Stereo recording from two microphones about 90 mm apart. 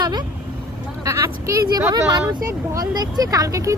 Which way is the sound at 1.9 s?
45° right (ahead or behind).